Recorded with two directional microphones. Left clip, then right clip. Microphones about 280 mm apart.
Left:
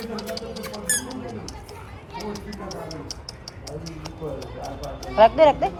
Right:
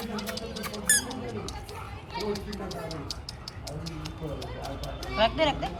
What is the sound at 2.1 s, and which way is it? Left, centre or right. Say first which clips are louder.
Music: right 1 dB; centre.